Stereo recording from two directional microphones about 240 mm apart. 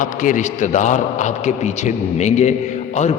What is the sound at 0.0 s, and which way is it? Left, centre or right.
A man's voice, left.